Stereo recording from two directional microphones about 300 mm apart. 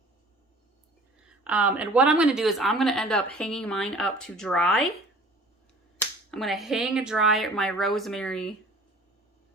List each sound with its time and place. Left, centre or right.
1.5 s speech: centre
6.3 s speech: centre